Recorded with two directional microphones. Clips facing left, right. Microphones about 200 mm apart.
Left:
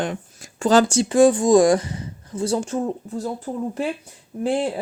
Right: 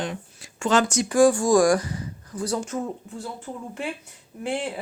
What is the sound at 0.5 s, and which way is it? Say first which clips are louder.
Speech: left 5 dB; 35° left (ahead or behind).